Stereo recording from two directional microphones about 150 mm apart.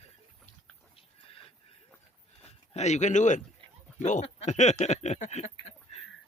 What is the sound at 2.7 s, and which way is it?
A man's voice, 50° left (ahead or behind).